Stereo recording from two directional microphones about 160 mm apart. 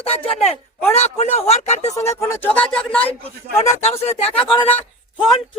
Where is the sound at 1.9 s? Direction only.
15° left (ahead or behind).